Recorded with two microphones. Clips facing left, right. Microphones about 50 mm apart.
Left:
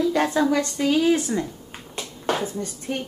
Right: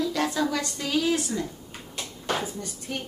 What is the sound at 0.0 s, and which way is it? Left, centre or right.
A woman's voice, left.